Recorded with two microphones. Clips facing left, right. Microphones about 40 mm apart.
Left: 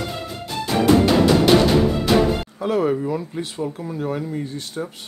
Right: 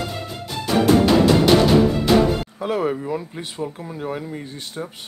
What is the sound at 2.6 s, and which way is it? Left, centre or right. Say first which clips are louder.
Speech: left 4 dB; centre.